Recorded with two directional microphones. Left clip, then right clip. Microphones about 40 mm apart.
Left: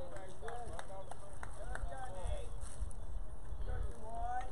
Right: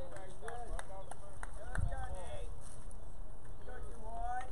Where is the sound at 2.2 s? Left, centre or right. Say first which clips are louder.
Even; right.